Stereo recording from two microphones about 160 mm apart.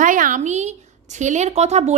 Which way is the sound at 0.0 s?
55° right (ahead or behind).